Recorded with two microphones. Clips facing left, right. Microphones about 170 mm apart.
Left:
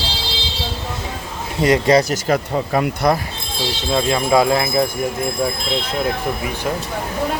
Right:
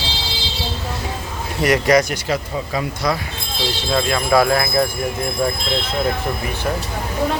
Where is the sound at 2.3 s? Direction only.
55° left (ahead or behind).